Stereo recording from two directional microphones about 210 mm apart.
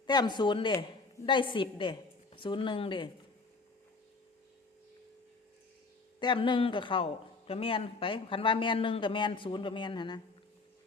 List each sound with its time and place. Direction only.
0.0 s a woman's voice: 20° left (ahead or behind)
6.1 s a man's voice: 25° left (ahead or behind)